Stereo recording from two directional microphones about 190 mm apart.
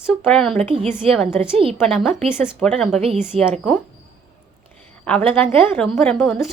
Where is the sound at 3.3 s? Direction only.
30° right (ahead or behind).